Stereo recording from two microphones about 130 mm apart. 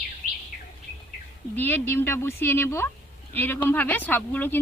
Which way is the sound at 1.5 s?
15° left (ahead or behind).